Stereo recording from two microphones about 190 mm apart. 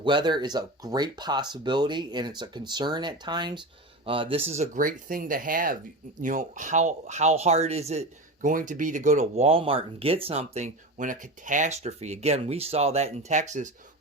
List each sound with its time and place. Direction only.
0.0 s speech: 25° right (ahead or behind); by 13.7 s 40° right (ahead or behind)